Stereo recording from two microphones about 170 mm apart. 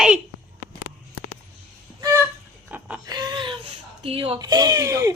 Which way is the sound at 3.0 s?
25° right (ahead or behind).